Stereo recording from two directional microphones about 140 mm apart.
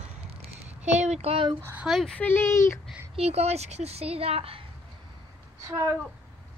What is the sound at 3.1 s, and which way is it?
A child's voice, 45° right (ahead or behind).